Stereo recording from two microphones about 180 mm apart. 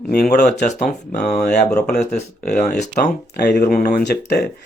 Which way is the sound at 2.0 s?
40° left (ahead or behind).